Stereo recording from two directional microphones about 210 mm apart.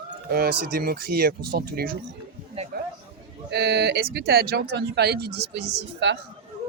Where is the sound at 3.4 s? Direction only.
50° right (ahead or behind).